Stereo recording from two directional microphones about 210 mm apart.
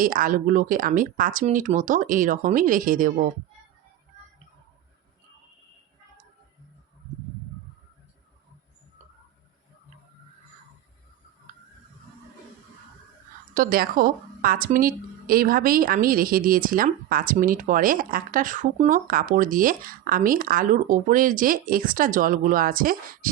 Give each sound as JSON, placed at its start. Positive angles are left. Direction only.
{"t": 0.0, "sound": "a woman's voice", "side_deg": -40}
{"t": 13.5, "sound": "a woman's voice", "side_deg": -45}